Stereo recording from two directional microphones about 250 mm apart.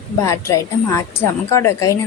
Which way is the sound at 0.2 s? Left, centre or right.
Centre.